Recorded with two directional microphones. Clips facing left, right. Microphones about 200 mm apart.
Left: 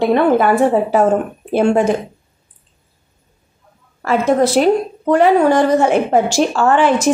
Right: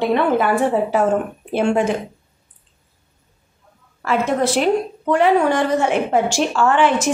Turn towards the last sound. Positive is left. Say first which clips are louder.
# left 3 dB
turn(degrees=40)  # may be behind; listen again after turning